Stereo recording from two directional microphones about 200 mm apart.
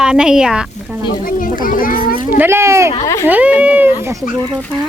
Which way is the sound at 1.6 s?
45° left (ahead or behind).